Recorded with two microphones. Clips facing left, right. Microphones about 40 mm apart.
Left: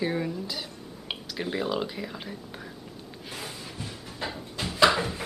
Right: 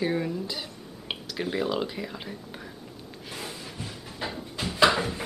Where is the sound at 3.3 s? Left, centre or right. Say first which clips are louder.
Right 1 dB; centre.